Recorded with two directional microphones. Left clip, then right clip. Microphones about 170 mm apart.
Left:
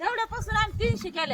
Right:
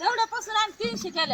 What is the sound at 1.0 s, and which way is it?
Speech, 25° left (ahead or behind).